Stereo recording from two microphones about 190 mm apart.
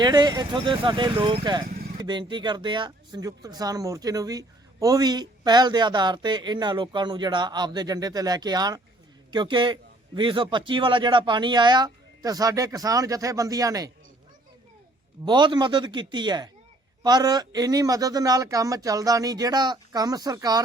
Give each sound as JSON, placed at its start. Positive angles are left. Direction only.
{"t": 0.0, "sound": "speech", "side_deg": -20}
{"t": 1.7, "sound": "vehicle", "side_deg": -50}
{"t": 2.0, "sound": "speech", "side_deg": -25}
{"t": 15.2, "sound": "speech", "side_deg": -25}